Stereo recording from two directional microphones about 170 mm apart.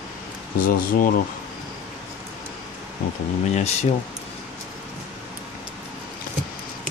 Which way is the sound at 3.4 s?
40° left (ahead or behind).